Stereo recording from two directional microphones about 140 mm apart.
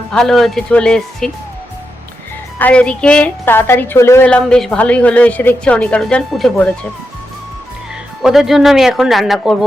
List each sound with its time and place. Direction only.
0.1 s speech: 5° left (ahead or behind)
2.6 s a woman's voice: 10° left (ahead or behind)
4.3 s a woman's voice: 5° left (ahead or behind)
8.2 s speech: centre (ahead or behind)